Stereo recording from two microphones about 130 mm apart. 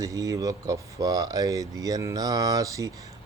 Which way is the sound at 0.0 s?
25° right (ahead or behind).